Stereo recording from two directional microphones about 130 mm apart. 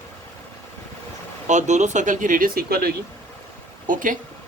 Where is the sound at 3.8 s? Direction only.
90° right.